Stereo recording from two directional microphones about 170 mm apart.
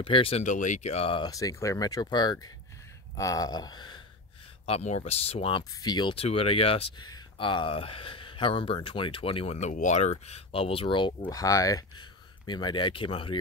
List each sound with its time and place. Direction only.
0.0 s speech: 30° left (ahead or behind)
4.6 s speech: 40° left (ahead or behind)
5.6 s speech: 25° left (ahead or behind)